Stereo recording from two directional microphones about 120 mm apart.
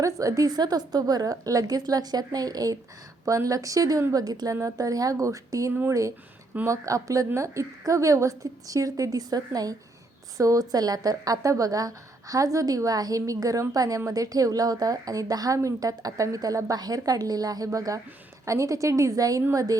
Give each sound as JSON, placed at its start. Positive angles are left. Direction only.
{"t": 0.0, "sound": "a woman's voice", "side_deg": -25}